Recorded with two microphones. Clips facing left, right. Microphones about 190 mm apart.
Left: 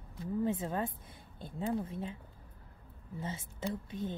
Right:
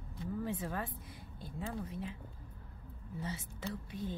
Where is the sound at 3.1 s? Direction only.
25° left (ahead or behind).